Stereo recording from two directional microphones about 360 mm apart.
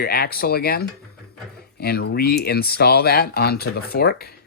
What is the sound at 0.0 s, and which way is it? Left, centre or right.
Speech, left.